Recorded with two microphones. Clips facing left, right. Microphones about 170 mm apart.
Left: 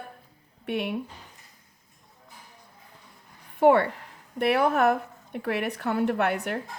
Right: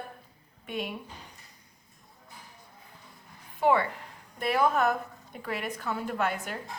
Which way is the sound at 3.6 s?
60° left (ahead or behind).